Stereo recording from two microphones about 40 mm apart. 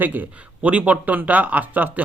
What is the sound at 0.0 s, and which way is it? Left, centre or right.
Speech, right.